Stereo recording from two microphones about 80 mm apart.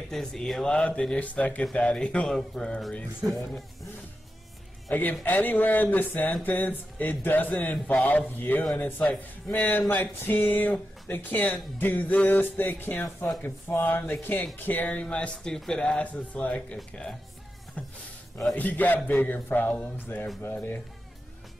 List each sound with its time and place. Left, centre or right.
0.1 s speech: centre
4.9 s speech: left
17.8 s a sound: centre
18.6 s speech: left